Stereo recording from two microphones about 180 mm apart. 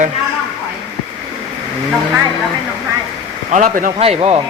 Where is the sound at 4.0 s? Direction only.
35° right (ahead or behind).